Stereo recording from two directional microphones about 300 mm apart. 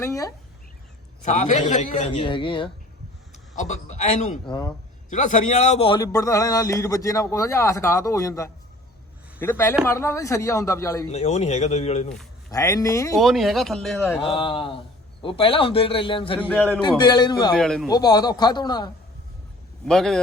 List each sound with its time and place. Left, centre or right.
0.0 s a man's voice: centre
1.2 s a man's voice: left
11.1 s a man's voice: left
12.5 s a man's voice: centre
13.1 s speech: centre
14.2 s a man's voice: centre
17.6 s speech: centre
17.9 s a man's voice: centre
19.9 s speech: centre